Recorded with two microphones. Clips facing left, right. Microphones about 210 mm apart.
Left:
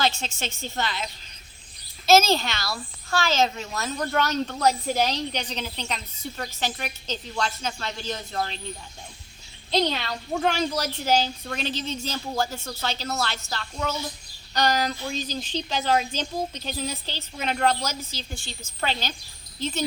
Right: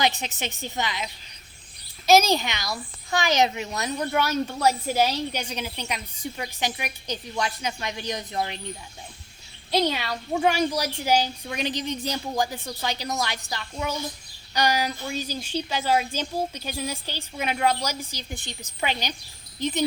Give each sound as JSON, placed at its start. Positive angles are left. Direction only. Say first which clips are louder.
{"t": 0.0, "sound": "a child's voice", "louder": "right 1 dB", "side_deg": -15}
{"t": 9.7, "sound": "a child's voice", "louder": "right 1 dB", "side_deg": -10}